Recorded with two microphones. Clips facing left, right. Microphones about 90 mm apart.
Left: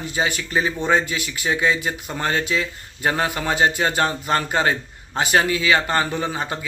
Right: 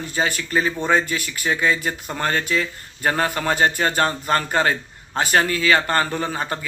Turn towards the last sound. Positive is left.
turn(degrees=15)  # may be behind; listen again after turning